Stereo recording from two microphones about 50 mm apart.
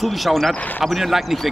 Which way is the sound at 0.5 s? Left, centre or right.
Left.